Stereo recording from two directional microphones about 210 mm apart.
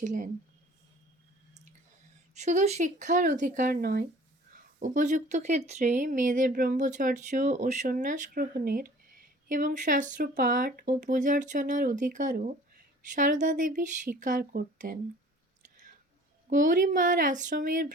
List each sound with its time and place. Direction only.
0.0 s speech: 35° right (ahead or behind)
2.3 s speech: 35° right (ahead or behind)
16.5 s speech: 40° right (ahead or behind)